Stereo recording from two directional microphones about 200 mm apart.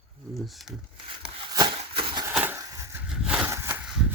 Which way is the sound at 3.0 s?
5° right (ahead or behind).